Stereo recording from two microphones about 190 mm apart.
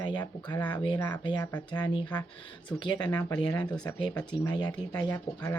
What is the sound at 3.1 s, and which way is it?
Speech, 10° left (ahead or behind).